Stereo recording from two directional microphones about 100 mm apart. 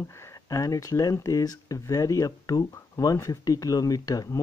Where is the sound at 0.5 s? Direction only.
35° left (ahead or behind).